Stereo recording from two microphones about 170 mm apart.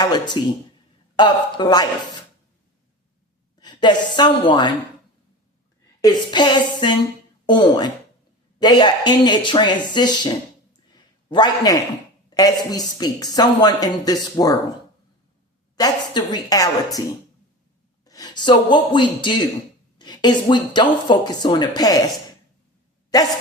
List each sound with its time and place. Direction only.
0.0 s speech: 25° left (ahead or behind)
3.6 s speech: 25° left (ahead or behind)
6.0 s speech: 25° left (ahead or behind)
10.9 s a sound: 25° left (ahead or behind)
12.3 s speech: 20° left (ahead or behind)
15.7 s speech: 25° left (ahead or behind)
18.0 s speech: 20° left (ahead or behind)